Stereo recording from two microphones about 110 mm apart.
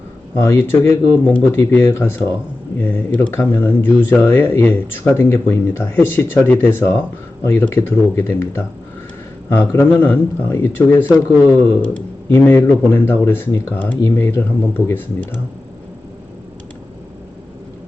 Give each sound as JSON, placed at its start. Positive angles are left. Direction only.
{"t": 0.3, "sound": "speech", "side_deg": 25}